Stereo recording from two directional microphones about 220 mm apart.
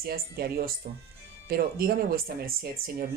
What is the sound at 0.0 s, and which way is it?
Speech, 45° right (ahead or behind).